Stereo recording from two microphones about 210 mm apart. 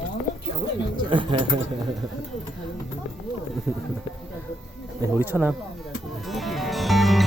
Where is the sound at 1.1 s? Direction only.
25° right (ahead or behind).